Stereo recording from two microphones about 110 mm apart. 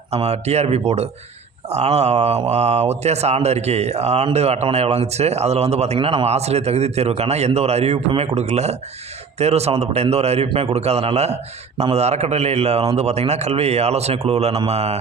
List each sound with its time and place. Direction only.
0.1 s a man's voice: 75° right (ahead or behind)
6.0 s a man's voice: 60° right (ahead or behind)